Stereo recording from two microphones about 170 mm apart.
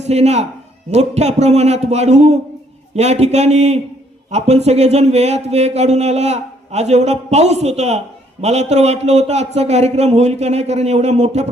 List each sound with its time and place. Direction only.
0.0 s a man's voice: 40° right (ahead or behind)